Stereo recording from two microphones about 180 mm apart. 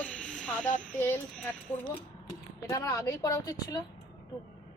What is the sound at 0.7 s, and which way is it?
Speech, 10° left (ahead or behind).